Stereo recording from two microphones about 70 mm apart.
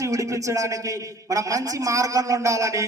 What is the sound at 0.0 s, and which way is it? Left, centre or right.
A man's voice, right.